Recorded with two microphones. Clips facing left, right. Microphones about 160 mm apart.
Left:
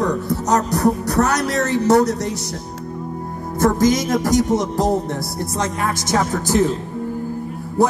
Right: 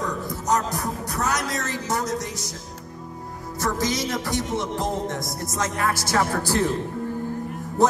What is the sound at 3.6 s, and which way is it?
Music, 50° left (ahead or behind).